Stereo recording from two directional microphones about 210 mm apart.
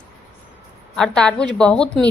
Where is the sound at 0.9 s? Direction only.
5° left (ahead or behind).